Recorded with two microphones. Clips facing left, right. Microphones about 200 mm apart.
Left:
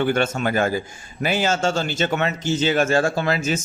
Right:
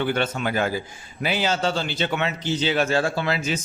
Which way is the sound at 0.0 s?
45° left (ahead or behind).